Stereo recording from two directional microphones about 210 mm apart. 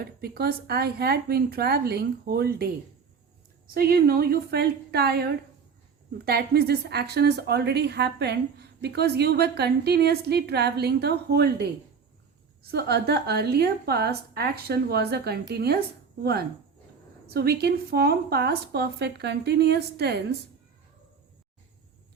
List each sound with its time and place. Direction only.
0.0 s a woman's voice: 50° right (ahead or behind)
3.8 s a woman's voice: 45° right (ahead or behind)
12.7 s a woman's voice: 50° right (ahead or behind)
17.2 s a woman's voice: 50° right (ahead or behind)